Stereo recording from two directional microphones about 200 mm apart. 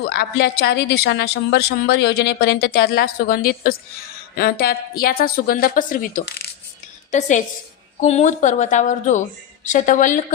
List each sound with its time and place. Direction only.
0.1 s a woman's voice: 55° left (ahead or behind)
6.2 s coin: 50° left (ahead or behind)
7.1 s a woman's voice: 35° left (ahead or behind)